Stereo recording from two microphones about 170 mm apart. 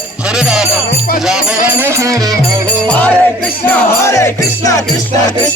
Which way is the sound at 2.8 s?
5° left (ahead or behind).